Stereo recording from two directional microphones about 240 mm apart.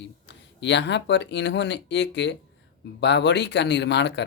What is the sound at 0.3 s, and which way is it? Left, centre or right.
Speech, left.